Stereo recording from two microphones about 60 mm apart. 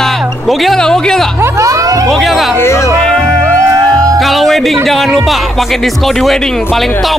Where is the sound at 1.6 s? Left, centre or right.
Right.